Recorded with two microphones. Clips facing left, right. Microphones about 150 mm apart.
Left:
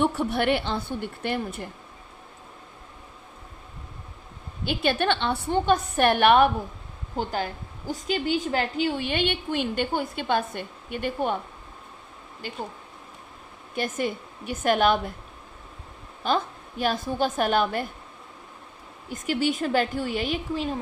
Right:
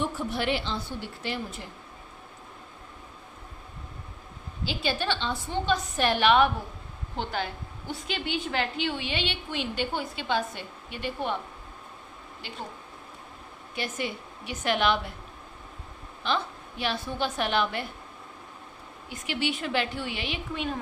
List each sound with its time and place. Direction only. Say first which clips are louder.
0.0 s a woman's voice: left 6 dB; 65° left (ahead or behind)
4.6 s a woman's voice: left 5 dB; 55° left (ahead or behind)
12.4 s a woman's voice: left 6 dB; 45° left (ahead or behind)
13.7 s a woman's voice: left 5 dB; 45° left (ahead or behind)
16.2 s a woman's voice: left 4 dB; 45° left (ahead or behind)
19.0 s a woman's voice: left 5 dB; 45° left (ahead or behind)